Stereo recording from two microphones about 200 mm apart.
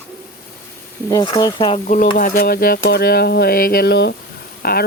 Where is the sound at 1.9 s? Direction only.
45° left (ahead or behind).